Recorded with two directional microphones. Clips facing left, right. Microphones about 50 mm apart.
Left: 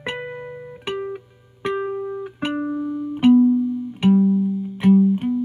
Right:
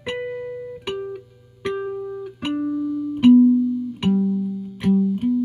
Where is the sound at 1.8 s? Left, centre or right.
Left.